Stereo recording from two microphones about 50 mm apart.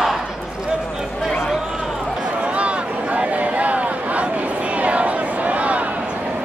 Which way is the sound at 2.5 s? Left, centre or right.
Right.